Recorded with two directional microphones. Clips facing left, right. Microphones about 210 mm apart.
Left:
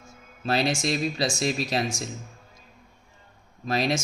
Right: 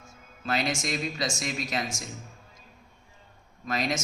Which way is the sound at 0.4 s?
30° left (ahead or behind).